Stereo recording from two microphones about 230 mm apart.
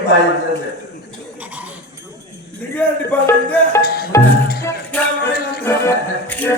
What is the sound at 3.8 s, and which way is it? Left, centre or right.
Music, left.